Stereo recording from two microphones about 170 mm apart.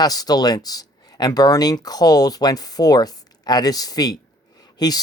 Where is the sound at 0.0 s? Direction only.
20° left (ahead or behind).